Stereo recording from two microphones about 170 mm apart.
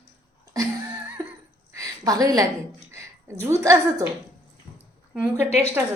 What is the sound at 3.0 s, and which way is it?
A woman's voice, 15° right (ahead or behind).